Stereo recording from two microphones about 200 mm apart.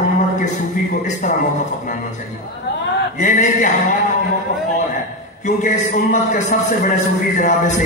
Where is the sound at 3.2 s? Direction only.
40° left (ahead or behind).